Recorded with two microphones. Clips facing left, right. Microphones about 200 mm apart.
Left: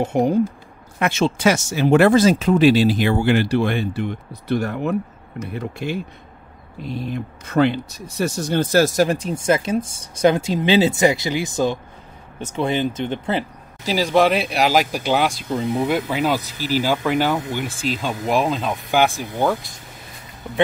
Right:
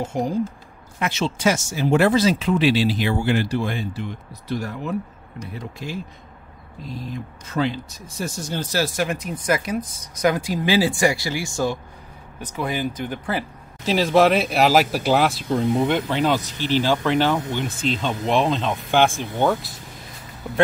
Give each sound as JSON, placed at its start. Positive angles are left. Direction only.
{"t": 0.0, "sound": "speech", "side_deg": 60}
{"t": 13.8, "sound": "speech", "side_deg": 0}